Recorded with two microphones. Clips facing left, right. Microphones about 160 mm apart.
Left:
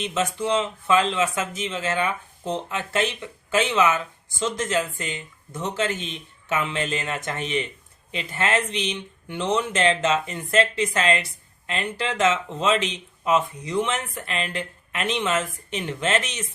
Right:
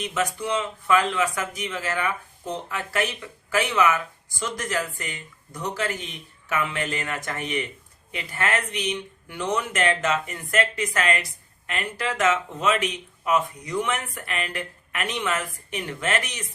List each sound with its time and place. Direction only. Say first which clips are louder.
0.0 s speech: left 2 dB; 25° left (ahead or behind)